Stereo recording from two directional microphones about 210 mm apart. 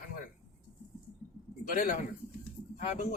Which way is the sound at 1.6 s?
40° left (ahead or behind).